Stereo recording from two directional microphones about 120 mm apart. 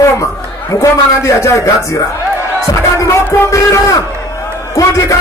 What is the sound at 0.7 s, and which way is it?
Speech, 25° left (ahead or behind).